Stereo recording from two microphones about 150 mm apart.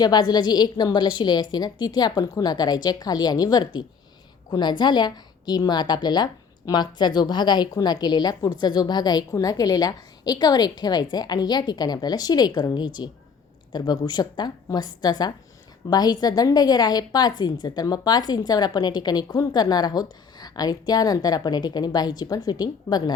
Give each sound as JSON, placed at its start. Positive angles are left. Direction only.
{"t": 0.0, "sound": "a woman's voice", "side_deg": 30}